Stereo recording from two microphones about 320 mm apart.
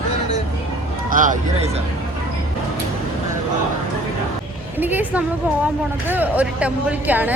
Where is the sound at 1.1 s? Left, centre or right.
Right.